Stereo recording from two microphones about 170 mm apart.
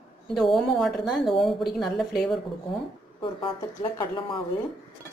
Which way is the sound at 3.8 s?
30° left (ahead or behind).